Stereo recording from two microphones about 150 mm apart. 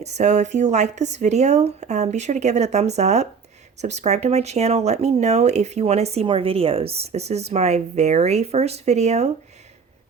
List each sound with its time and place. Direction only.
0.0 s speech: 50° right (ahead or behind)